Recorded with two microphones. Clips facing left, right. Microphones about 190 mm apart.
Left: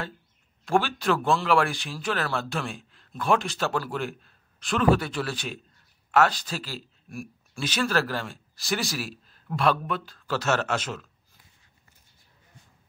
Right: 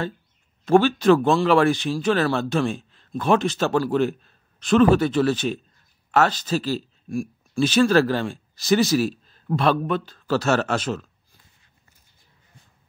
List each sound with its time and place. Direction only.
0.7 s speech: 20° right (ahead or behind)
7.5 s speech: 25° right (ahead or behind)